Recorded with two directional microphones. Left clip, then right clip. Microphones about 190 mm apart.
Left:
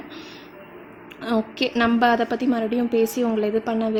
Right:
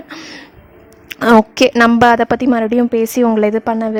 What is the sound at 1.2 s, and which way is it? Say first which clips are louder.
A woman's voice: right 14 dB; 45° right (ahead or behind).